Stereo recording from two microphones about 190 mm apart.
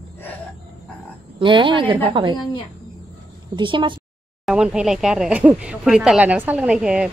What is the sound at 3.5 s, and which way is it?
Speech, 25° right (ahead or behind).